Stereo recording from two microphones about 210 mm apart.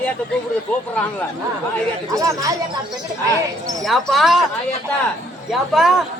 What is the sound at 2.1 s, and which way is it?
Speech, 15° right (ahead or behind).